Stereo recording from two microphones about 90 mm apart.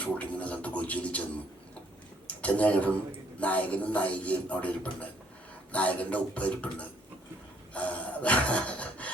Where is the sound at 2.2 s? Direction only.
15° left (ahead or behind).